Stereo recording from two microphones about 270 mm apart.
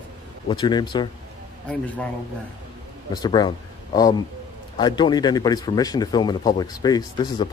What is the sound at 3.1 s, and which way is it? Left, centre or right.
Speech, centre.